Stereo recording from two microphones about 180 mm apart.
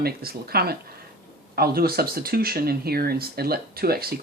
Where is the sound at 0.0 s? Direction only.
60° right (ahead or behind).